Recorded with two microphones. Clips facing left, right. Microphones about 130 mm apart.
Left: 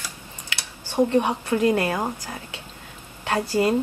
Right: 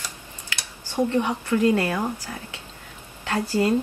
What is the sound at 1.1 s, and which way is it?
Speech, 20° left (ahead or behind).